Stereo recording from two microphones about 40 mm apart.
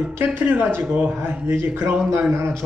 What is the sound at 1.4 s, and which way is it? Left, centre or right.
Speech, right.